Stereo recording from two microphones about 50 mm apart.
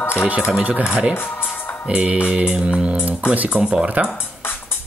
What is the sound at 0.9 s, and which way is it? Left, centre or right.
Speech, centre.